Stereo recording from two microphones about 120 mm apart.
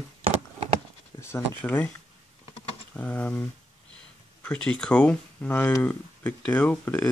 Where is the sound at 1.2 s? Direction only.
20° left (ahead or behind).